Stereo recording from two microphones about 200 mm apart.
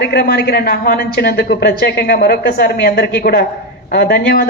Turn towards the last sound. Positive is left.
turn(degrees=50)  # may be behind; listen again after turning